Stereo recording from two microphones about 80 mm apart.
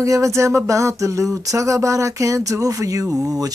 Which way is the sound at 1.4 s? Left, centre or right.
Right.